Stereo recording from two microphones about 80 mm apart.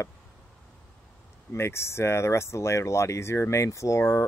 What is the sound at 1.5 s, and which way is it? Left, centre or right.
Speech, left.